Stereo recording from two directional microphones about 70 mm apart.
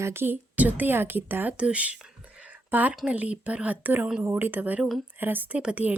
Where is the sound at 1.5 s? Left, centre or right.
Centre.